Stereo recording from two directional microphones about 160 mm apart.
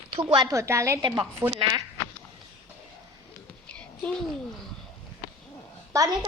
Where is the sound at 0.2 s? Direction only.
30° right (ahead or behind).